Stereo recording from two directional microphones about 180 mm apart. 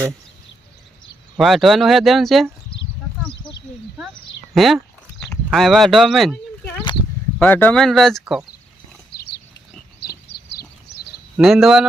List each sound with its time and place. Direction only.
1.4 s speech: centre (ahead or behind)
4.5 s speech: centre (ahead or behind)
5.3 s a sound: centre (ahead or behind)
7.3 s speech: 10° left (ahead or behind)
9.1 s pig: 60° left (ahead or behind)
10.9 s a sound: 65° left (ahead or behind)
11.3 s speech: centre (ahead or behind)